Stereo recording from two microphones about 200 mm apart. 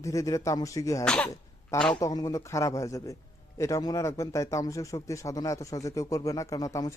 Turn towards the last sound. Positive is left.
turn(degrees=15)  # may be behind; listen again after turning